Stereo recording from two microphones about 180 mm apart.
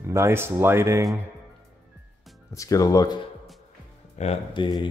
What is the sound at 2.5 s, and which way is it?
Speech, 20° left (ahead or behind).